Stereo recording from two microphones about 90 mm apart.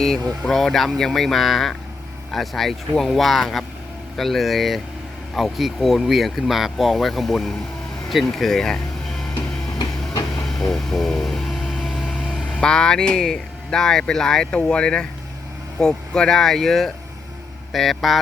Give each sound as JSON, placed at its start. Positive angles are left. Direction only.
{"t": 0.0, "sound": "speech", "side_deg": 5}
{"t": 9.3, "sound": "a sound", "side_deg": 55}
{"t": 10.6, "sound": "vehicle", "side_deg": 0}
{"t": 12.5, "sound": "speech", "side_deg": 10}